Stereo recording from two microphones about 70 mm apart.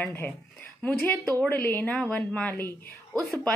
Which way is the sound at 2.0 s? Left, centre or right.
Centre.